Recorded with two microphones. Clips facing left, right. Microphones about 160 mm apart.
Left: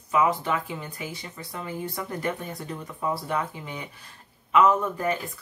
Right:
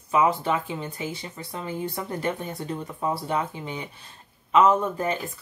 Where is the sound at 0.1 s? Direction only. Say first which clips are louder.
Right 2 dB; 25° right (ahead or behind).